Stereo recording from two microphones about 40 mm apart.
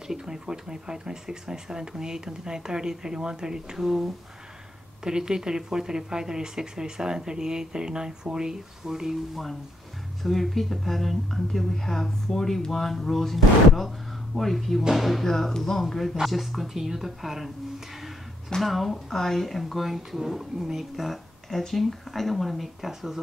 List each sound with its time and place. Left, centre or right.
0.1 s speech: centre
10.2 s speech: centre
14.8 s speech: centre
15.2 s speech: centre
18.6 s speech: centre